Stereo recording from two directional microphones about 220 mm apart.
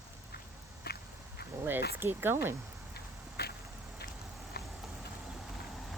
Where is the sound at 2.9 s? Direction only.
45° left (ahead or behind).